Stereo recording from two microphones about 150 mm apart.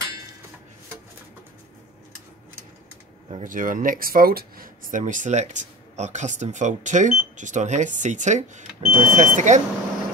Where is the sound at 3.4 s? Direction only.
60° right (ahead or behind).